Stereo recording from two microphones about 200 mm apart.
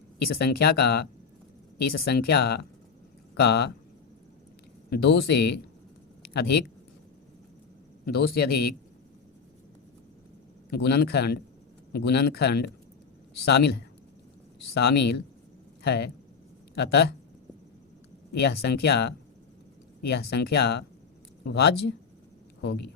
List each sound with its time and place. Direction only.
0.2 s speech: 50° left (ahead or behind)
4.9 s speech: 55° left (ahead or behind)
8.0 s speech: 50° left (ahead or behind)
10.7 s speech: 55° left (ahead or behind)
18.3 s speech: 55° left (ahead or behind)